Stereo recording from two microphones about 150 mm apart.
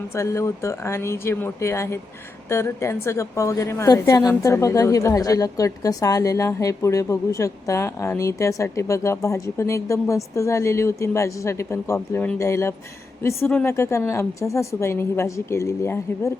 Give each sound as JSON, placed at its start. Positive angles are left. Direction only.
{"t": 0.1, "sound": "a woman's voice", "side_deg": 20}